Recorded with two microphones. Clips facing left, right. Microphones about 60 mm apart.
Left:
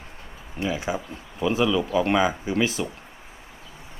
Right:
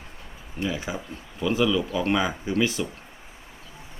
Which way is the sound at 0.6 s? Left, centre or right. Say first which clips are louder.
Left 3 dB; left.